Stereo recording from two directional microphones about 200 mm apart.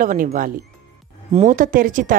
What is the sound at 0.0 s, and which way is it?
A woman's voice, 40° right (ahead or behind).